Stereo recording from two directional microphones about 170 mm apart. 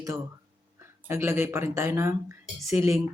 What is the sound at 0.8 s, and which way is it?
Speech, 15° right (ahead or behind).